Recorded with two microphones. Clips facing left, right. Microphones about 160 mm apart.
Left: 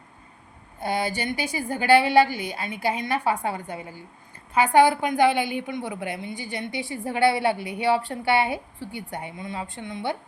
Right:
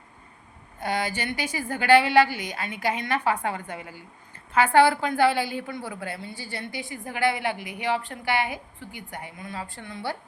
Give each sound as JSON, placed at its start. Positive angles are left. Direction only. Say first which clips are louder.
{"t": 0.8, "sound": "a woman's voice", "louder": "left 2 dB", "side_deg": 10}